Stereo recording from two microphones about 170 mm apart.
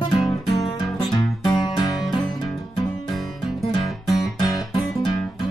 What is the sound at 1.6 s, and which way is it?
Music, 25° left (ahead or behind).